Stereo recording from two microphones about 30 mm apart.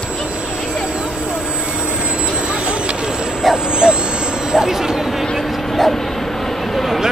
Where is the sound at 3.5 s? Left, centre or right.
Right.